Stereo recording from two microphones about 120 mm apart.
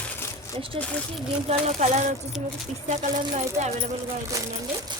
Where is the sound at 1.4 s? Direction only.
65° right (ahead or behind).